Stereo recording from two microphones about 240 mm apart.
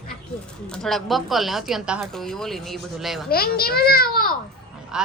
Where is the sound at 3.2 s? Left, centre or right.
Left.